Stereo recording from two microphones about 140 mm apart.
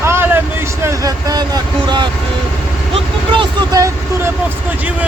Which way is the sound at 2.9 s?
35° right (ahead or behind).